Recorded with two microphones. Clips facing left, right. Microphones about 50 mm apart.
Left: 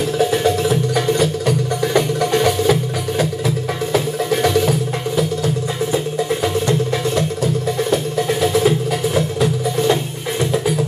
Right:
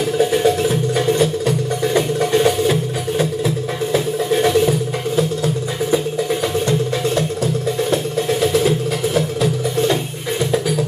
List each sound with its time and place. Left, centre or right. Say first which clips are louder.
5.1 s music: right 1 dB; right
8.4 s music: left 1 dB; left